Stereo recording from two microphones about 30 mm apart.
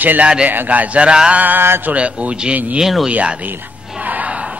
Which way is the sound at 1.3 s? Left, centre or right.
Right.